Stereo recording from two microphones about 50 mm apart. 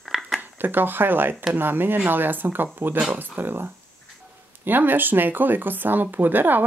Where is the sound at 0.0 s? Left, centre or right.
Centre.